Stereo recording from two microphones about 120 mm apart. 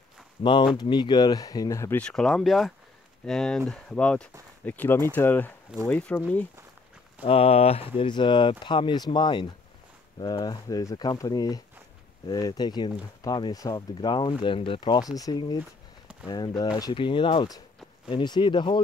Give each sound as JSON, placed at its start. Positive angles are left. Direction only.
{"t": 0.4, "sound": "speech", "side_deg": 40}
{"t": 2.0, "sound": "speech", "side_deg": 5}
{"t": 7.2, "sound": "speech", "side_deg": 55}
{"t": 17.0, "sound": "speech", "side_deg": 45}